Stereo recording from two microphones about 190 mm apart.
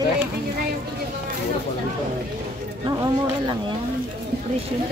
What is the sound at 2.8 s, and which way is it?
Speech, 25° right (ahead or behind).